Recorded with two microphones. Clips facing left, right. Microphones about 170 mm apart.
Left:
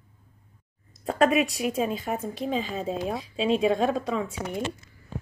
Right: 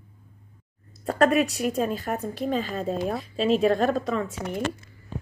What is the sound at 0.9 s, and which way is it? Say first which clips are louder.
Speech: right 1 dB; centre (ahead or behind).